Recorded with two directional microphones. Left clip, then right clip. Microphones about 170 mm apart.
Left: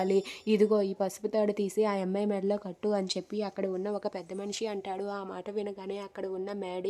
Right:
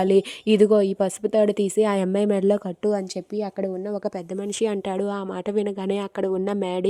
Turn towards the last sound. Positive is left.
turn(degrees=-40)  # may be behind; listen again after turning